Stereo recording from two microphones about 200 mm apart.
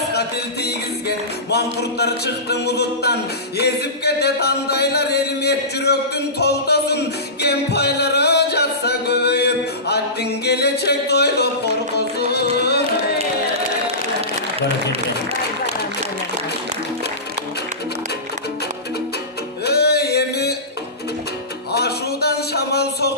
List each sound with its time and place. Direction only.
0.1 s music: 55° left (ahead or behind)
19.6 s music: 55° left (ahead or behind)
21.7 s a sound: 55° left (ahead or behind)